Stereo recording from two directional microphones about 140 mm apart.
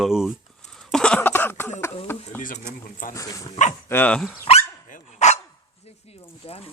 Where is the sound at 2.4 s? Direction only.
70° left (ahead or behind).